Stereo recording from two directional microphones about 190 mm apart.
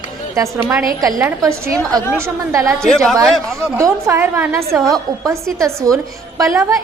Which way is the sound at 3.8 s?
15° right (ahead or behind).